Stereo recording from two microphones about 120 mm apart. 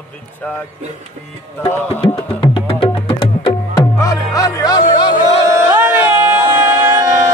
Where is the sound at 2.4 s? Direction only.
45° left (ahead or behind).